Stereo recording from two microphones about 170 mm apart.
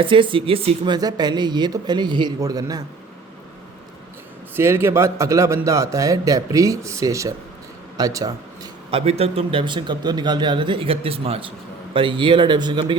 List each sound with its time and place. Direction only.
0.0 s a man's voice: 30° right (ahead or behind)
0.9 s speech: 25° right (ahead or behind)
4.5 s a man's voice: 15° right (ahead or behind)
8.9 s a man's voice: 35° right (ahead or behind)